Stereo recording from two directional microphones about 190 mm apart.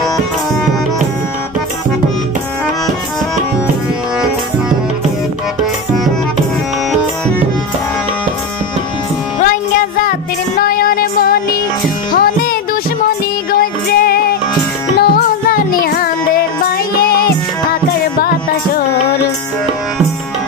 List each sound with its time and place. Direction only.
9.4 s music: 45° left (ahead or behind)
18.8 s music: 55° left (ahead or behind)